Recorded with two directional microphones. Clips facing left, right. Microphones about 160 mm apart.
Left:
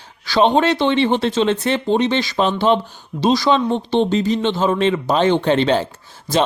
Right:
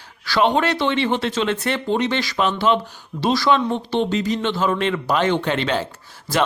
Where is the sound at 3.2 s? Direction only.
20° left (ahead or behind).